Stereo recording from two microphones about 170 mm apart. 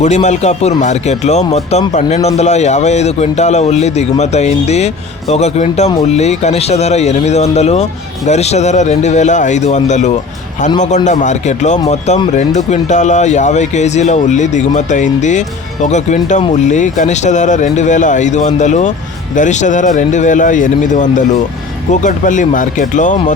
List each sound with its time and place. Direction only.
0.0 s a man's voice: 40° left (ahead or behind)